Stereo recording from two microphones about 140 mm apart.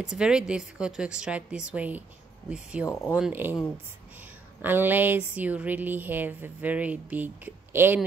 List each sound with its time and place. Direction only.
0.0 s speech: 5° right (ahead or behind)